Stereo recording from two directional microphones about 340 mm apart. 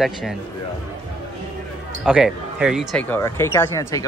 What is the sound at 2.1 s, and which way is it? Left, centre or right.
Speech, centre.